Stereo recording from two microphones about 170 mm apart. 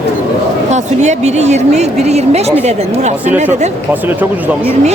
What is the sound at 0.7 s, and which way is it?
Speech, 40° right (ahead or behind).